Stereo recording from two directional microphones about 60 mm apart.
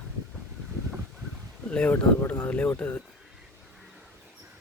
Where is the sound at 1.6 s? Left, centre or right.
Centre.